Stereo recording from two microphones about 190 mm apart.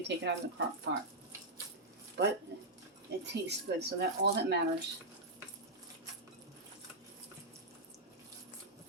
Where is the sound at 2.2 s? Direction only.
60° right (ahead or behind).